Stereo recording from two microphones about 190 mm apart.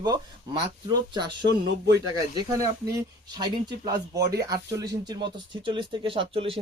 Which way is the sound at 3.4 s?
20° right (ahead or behind).